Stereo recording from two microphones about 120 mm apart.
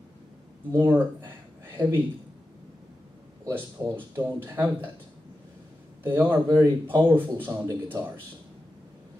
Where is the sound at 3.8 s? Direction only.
30° right (ahead or behind).